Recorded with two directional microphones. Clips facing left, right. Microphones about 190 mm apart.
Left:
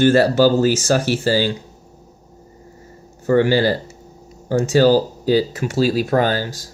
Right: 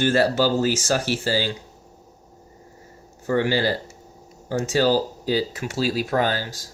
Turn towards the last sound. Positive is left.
turn(degrees=45)  # may be behind; listen again after turning